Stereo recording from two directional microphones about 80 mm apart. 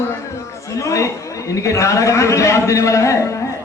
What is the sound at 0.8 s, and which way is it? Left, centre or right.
Chatter, left.